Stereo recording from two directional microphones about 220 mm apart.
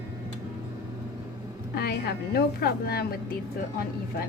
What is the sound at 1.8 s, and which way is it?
A woman's voice, 45° left (ahead or behind).